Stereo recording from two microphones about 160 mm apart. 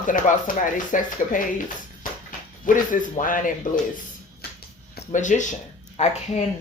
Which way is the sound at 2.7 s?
55° left (ahead or behind).